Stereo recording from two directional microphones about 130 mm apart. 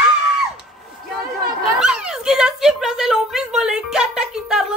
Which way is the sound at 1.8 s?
5° right (ahead or behind).